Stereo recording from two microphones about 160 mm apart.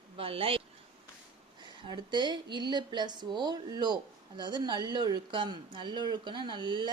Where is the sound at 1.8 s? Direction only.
30° right (ahead or behind).